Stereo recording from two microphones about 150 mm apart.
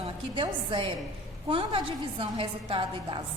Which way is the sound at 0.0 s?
35° right (ahead or behind).